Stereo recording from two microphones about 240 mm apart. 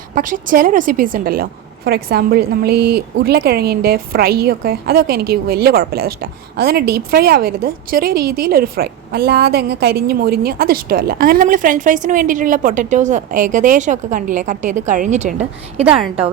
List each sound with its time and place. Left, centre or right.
0.1 s a woman's voice: right